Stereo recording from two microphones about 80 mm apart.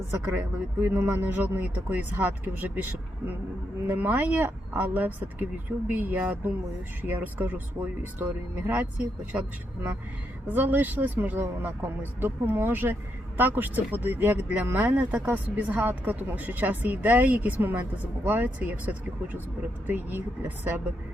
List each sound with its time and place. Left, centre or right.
0.1 s speech: right
1.9 s speech: centre
3.8 s speech: right
10.5 s speech: right